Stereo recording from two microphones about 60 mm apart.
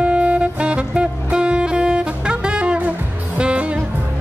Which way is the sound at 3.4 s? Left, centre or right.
Centre.